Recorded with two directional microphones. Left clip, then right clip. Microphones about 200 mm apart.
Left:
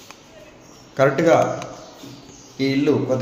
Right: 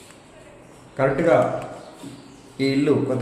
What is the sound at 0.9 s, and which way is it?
Speech, 50° left (ahead or behind).